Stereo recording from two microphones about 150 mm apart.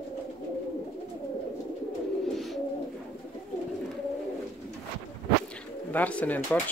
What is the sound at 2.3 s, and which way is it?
Bird, centre (ahead or behind).